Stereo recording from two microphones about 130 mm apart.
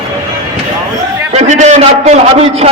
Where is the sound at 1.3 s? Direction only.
70° right (ahead or behind).